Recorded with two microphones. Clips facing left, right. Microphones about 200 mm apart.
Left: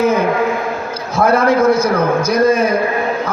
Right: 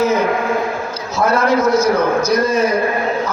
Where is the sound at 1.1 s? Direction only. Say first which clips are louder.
Left 2 dB; 55° left (ahead or behind).